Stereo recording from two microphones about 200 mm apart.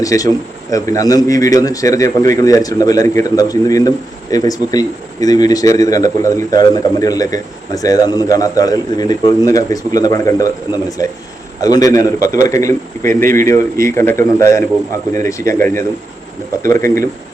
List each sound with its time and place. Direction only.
0.0 s a man's voice: 15° left (ahead or behind)